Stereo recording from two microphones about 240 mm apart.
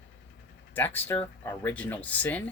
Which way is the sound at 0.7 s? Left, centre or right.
Centre.